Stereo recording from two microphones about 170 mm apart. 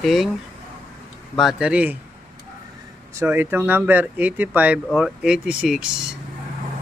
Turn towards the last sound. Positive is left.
turn(degrees=-5)  # may be behind; listen again after turning